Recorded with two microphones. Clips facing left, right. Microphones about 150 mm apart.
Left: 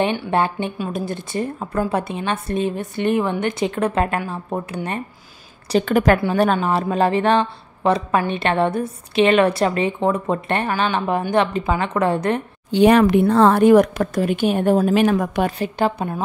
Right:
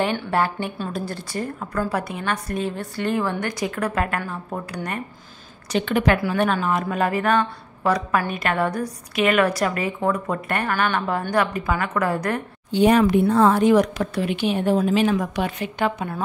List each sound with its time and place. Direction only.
0.0 s speech: 20° left (ahead or behind)
5.7 s speech: 40° left (ahead or behind)
12.7 s speech: 75° left (ahead or behind); by 15.5 s 50° left (ahead or behind)
15.6 s a woman's voice: 35° left (ahead or behind)